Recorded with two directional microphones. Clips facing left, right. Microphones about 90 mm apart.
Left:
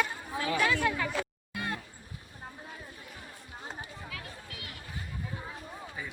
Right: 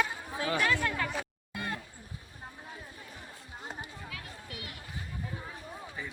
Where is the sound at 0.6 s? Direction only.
10° left (ahead or behind).